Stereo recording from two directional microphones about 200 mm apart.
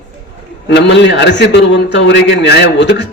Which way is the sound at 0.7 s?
60° left (ahead or behind).